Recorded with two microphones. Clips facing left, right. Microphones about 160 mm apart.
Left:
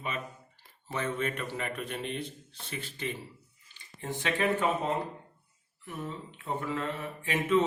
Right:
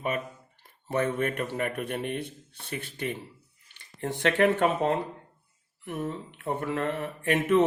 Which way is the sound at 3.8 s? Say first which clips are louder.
Right 5 dB; 70° right (ahead or behind).